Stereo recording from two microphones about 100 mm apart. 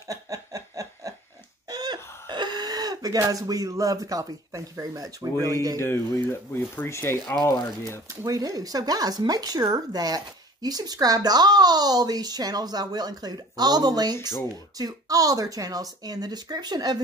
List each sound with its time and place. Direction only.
0.1 s snicker: 35° right (ahead or behind)
1.7 s a sound: 40° right (ahead or behind)
2.2 s speech: 45° right (ahead or behind)
5.8 s speech: 25° left (ahead or behind)
8.3 s speech: 35° right (ahead or behind)